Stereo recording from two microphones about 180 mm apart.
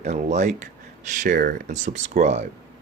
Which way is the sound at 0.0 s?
40° right (ahead or behind).